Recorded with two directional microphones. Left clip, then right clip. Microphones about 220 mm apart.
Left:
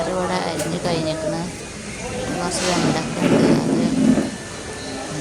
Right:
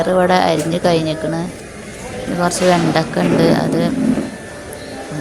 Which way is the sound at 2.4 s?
30° right (ahead or behind).